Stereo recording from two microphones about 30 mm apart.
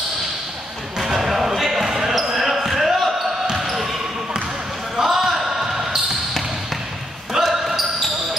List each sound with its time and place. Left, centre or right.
0.9 s basketball bounce: centre
4.9 s basketball bounce: centre
7.4 s basketball bounce: centre